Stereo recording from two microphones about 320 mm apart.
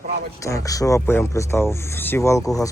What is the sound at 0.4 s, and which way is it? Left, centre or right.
Speech, centre.